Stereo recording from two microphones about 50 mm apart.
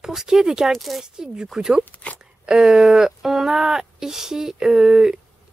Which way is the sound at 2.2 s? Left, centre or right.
Centre.